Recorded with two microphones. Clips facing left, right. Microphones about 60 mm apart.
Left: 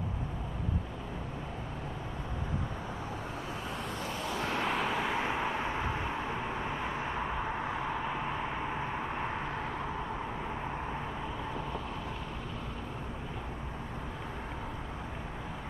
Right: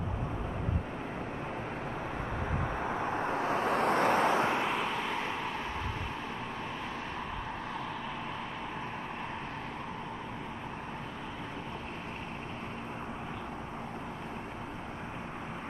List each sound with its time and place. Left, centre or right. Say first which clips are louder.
2.8 s vehicle: right 7 dB; right
4.2 s vehicle: right 7 dB; right
4.6 s vehicle: left 1 dB; centre; by 5.9 s left
7.2 s vehicle: left 4 dB; left